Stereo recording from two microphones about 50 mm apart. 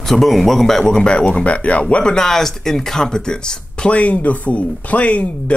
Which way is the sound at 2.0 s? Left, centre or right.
Centre.